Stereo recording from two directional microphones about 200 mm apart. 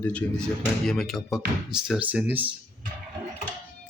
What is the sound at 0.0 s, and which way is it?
Speech, 5° left (ahead or behind).